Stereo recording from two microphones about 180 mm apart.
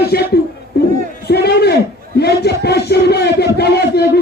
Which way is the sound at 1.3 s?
65° left (ahead or behind).